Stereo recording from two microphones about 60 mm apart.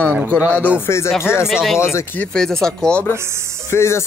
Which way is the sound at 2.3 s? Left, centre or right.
Centre.